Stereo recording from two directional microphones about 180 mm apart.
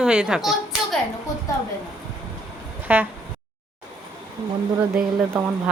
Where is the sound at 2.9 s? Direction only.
5° right (ahead or behind).